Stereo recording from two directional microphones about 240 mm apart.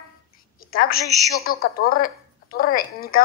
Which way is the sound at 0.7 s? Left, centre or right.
Left.